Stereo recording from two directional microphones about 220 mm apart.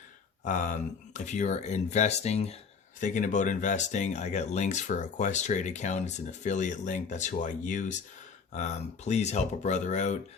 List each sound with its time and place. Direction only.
0.4 s speech: 35° left (ahead or behind)